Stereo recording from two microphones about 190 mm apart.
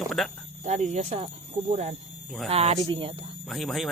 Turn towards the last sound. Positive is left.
turn(degrees=0)  # may be behind; listen again after turning